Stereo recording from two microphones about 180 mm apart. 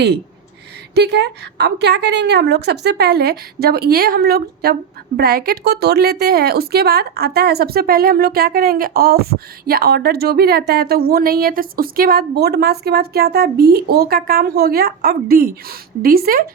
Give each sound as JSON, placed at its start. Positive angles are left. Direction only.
{"t": 0.9, "sound": "a woman's voice", "side_deg": -70}